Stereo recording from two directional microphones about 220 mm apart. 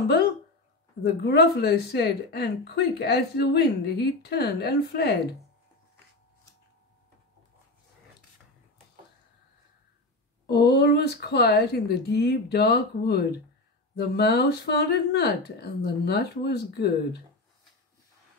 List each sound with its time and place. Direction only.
1.0 s a woman's voice: 45° left (ahead or behind)
10.4 s a woman's voice: 45° left (ahead or behind)